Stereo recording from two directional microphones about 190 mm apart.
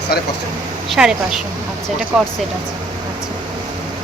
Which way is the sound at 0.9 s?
5° right (ahead or behind).